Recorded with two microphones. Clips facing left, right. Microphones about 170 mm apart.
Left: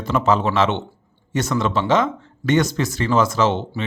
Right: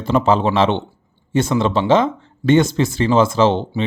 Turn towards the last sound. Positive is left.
turn(degrees=-30)  # may be behind; listen again after turning